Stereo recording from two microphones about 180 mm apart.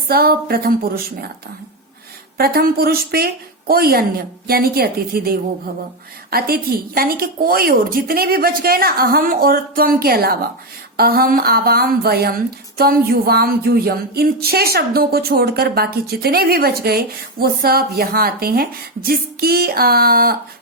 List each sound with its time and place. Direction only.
0.1 s a woman's voice: 55° right (ahead or behind)
2.4 s a woman's voice: 60° right (ahead or behind)